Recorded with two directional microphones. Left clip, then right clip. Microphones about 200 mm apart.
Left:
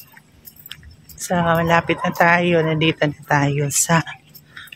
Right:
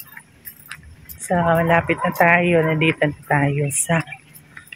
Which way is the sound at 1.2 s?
5° left (ahead or behind).